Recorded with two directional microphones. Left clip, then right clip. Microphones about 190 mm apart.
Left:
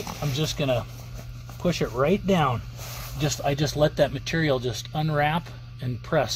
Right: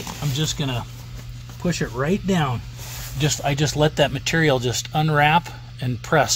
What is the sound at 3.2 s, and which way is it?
Speech, 40° right (ahead or behind).